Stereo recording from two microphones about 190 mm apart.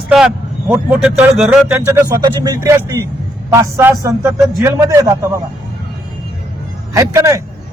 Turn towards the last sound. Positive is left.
turn(degrees=-15)  # may be behind; listen again after turning